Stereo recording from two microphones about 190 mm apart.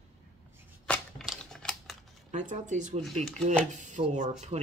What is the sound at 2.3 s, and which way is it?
Speech, 40° right (ahead or behind).